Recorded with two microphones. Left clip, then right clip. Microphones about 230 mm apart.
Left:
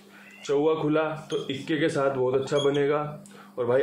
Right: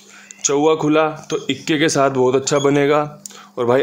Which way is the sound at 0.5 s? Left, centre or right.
Right.